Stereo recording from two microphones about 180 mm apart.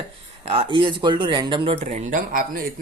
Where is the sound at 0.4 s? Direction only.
30° right (ahead or behind).